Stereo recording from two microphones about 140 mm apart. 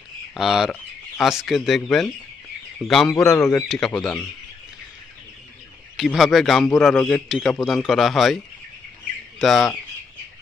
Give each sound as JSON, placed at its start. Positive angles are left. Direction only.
{"t": 0.3, "sound": "a man's voice", "side_deg": -5}
{"t": 3.2, "sound": "speech", "side_deg": 20}
{"t": 3.6, "sound": "a man's voice", "side_deg": 5}
{"t": 5.9, "sound": "a man's voice", "side_deg": 0}
{"t": 9.4, "sound": "a man's voice", "side_deg": 0}